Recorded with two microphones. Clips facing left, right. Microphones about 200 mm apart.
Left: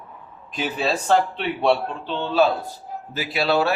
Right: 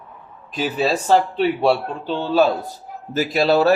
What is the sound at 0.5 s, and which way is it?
Speech, 40° right (ahead or behind).